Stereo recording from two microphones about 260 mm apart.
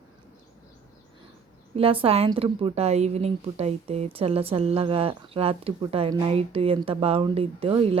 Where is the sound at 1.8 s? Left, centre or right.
Right.